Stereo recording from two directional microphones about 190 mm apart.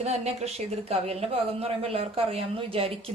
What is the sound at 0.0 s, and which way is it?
A man's voice, 35° right (ahead or behind).